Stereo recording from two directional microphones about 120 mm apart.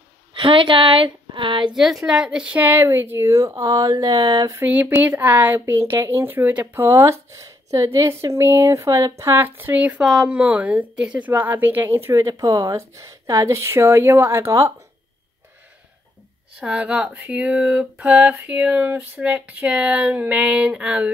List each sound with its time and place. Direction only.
0.3 s speech: 45° right (ahead or behind)
1.8 s speech: 5° right (ahead or behind); by 4.6 s 35° right (ahead or behind)
4.6 s speech: 20° right (ahead or behind)
16.5 s speech: 10° right (ahead or behind)